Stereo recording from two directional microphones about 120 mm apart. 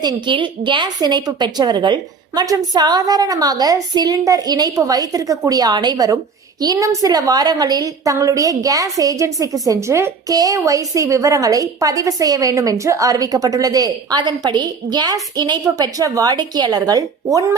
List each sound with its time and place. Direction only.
0.0 s a woman's voice: 40° right (ahead or behind)